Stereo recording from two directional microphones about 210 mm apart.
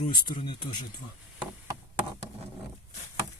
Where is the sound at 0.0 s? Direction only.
20° left (ahead or behind).